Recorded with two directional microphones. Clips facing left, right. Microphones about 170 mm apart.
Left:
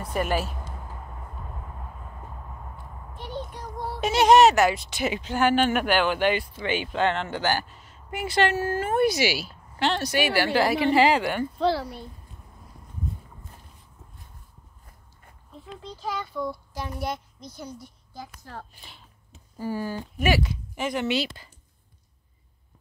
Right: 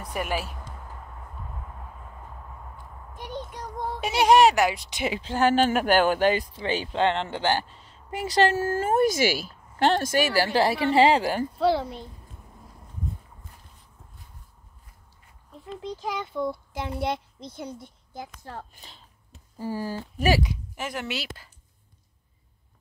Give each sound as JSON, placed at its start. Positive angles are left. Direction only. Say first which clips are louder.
{"t": 0.0, "sound": "speech", "louder": "left 3 dB", "side_deg": -10}
{"t": 4.0, "sound": "speech", "louder": "left 2 dB", "side_deg": -10}
{"t": 5.0, "sound": "speech", "louder": "even", "side_deg": -30}
{"t": 11.7, "sound": "a child's voice", "louder": "right 2 dB", "side_deg": -20}
{"t": 15.8, "sound": "a child's voice", "louder": "right 1 dB", "side_deg": -20}
{"t": 19.6, "sound": "speech", "louder": "left 1 dB", "side_deg": -30}
{"t": 20.4, "sound": "speech", "louder": "left 4 dB", "side_deg": -5}